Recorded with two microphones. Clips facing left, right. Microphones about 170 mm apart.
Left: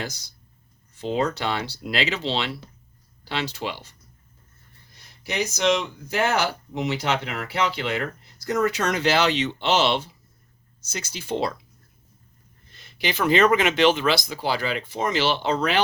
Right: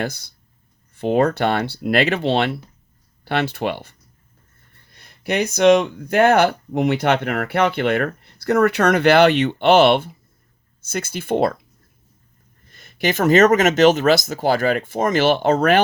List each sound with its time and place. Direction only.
0.0 s speech: 60° right (ahead or behind)
12.7 s speech: 50° right (ahead or behind)